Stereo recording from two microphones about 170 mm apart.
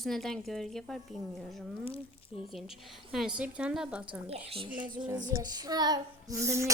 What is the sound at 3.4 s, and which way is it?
Speech, 5° right (ahead or behind).